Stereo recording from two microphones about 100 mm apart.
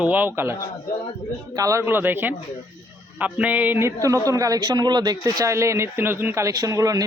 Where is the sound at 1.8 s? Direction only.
20° right (ahead or behind).